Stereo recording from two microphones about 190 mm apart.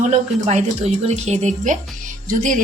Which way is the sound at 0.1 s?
40° right (ahead or behind).